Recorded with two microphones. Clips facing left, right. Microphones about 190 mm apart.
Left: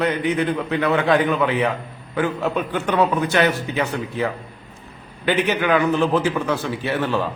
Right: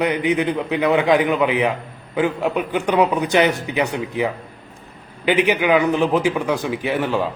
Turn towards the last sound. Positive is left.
turn(degrees=-15)  # may be behind; listen again after turning